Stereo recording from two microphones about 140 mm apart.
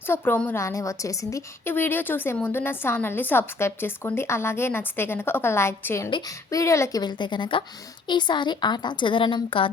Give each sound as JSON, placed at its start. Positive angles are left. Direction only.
{"t": 0.1, "sound": "a woman's voice", "side_deg": 15}
{"t": 6.1, "sound": "a woman's voice", "side_deg": 30}